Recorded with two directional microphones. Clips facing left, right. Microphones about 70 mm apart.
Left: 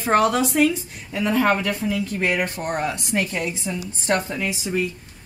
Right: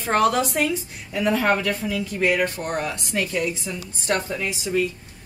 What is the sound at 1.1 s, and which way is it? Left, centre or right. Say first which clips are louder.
Speech: even; centre.